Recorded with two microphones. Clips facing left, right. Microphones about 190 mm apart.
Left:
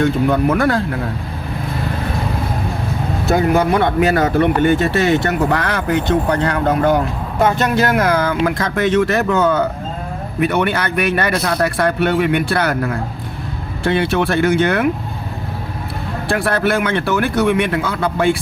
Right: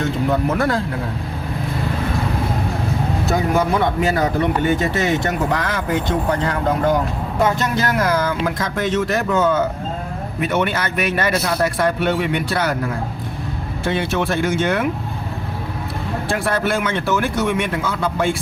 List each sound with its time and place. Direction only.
0.5 s speech: 70° left (ahead or behind)
3.3 s speech: 65° left (ahead or behind)
13.8 s speech: 65° left (ahead or behind)
16.3 s speech: 65° left (ahead or behind)